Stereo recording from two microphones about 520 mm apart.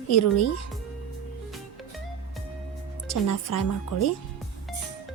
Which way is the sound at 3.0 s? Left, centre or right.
Left.